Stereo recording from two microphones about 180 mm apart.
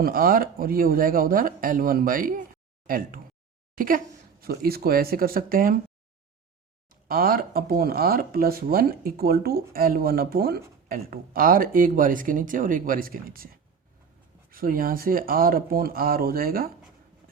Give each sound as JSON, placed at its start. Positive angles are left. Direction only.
{"t": 0.0, "sound": "speech", "side_deg": -50}
{"t": 7.1, "sound": "speech", "side_deg": -55}